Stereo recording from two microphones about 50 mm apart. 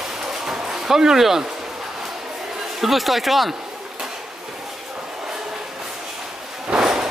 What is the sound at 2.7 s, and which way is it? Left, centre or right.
Speech, centre.